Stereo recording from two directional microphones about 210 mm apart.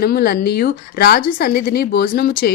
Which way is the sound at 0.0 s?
45° left (ahead or behind).